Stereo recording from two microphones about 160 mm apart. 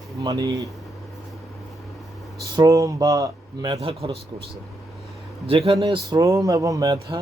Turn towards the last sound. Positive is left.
turn(degrees=-20)  # may be behind; listen again after turning